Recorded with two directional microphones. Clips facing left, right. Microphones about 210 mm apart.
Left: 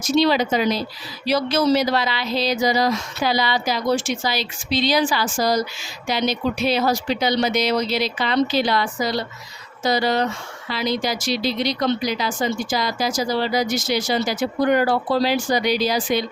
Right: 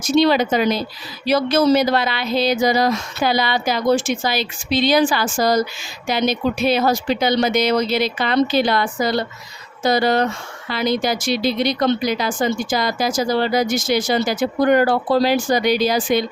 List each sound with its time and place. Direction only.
0.0 s speech: 55° right (ahead or behind)